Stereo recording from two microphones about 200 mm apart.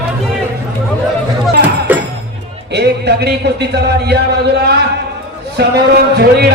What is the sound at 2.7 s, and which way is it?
Speech, 55° right (ahead or behind).